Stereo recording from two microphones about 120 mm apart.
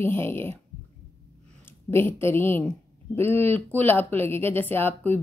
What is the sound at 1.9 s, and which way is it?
Speech, 20° left (ahead or behind).